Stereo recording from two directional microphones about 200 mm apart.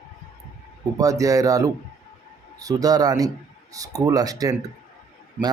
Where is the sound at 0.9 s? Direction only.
15° right (ahead or behind).